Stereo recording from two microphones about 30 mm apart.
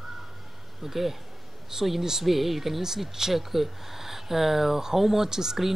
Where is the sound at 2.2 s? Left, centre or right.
Centre.